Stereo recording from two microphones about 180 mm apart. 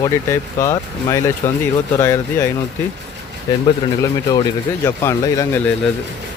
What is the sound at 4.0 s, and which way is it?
Speech, 20° left (ahead or behind).